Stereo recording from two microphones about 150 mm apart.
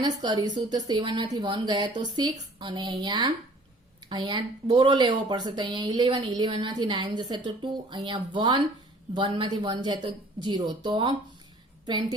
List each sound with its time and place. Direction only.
0.0 s speech: 30° right (ahead or behind)